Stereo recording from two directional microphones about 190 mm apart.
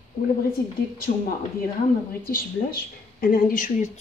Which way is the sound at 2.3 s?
50° left (ahead or behind).